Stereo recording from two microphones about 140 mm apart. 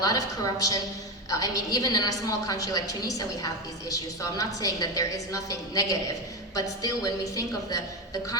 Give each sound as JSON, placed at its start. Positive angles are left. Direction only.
{"t": 0.0, "sound": "a woman's voice", "side_deg": 25}